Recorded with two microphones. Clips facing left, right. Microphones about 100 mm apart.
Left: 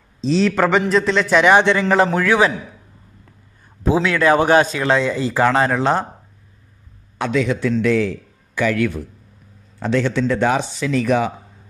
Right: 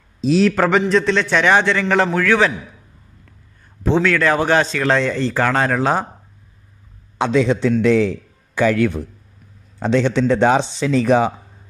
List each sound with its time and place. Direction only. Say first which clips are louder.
0.2 s a man's voice: right 1 dB; 5° right (ahead or behind)
1.5 s speech: left 2 dB; 20° left (ahead or behind)
3.8 s speech: even; 15° left (ahead or behind)
4.8 s a man's voice: even; 5° left (ahead or behind)
7.2 s a man's voice: right 3 dB; 25° right (ahead or behind)